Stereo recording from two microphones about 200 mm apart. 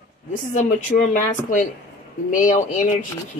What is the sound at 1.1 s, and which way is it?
A woman's voice, 40° left (ahead or behind).